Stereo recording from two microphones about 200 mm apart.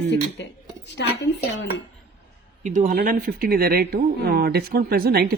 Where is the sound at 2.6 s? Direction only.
40° right (ahead or behind).